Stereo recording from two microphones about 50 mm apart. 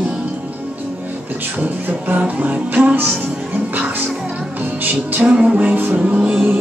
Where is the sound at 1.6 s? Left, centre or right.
Right.